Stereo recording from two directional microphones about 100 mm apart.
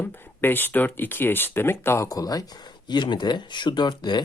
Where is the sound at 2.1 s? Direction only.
40° left (ahead or behind).